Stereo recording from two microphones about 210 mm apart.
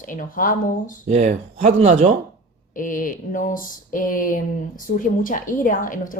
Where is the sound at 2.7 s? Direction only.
40° left (ahead or behind).